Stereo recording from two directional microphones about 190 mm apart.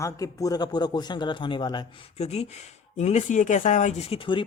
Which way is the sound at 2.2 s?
35° left (ahead or behind).